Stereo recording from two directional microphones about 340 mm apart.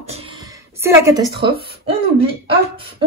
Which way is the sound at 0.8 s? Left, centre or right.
Centre.